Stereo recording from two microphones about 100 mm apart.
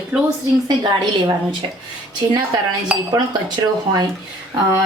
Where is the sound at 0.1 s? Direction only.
10° right (ahead or behind).